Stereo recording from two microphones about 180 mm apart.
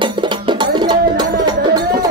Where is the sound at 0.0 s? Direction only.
25° right (ahead or behind).